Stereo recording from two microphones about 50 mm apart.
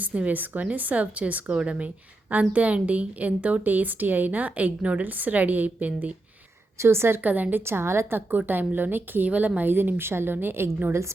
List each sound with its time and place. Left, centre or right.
0.0 s a woman's voice: right
6.7 s a woman's voice: right
7.2 s a woman's voice: right
7.6 s a woman's voice: right
8.3 s a woman's voice: right